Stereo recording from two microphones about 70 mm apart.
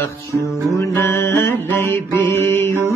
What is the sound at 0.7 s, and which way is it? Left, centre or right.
Music, left.